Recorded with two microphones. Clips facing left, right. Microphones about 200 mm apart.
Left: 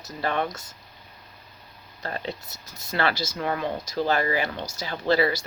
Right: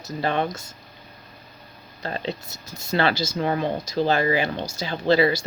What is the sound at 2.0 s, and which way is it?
Speech, 25° right (ahead or behind).